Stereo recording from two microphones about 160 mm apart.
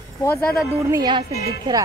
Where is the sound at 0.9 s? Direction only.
25° right (ahead or behind).